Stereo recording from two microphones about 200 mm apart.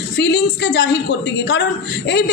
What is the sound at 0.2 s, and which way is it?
Speech, 65° left (ahead or behind).